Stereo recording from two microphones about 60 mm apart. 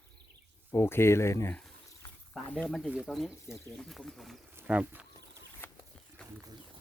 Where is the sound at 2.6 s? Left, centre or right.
Centre.